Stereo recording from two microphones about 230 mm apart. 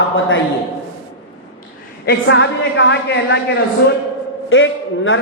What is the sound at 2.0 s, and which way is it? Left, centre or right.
A woman's voice, left.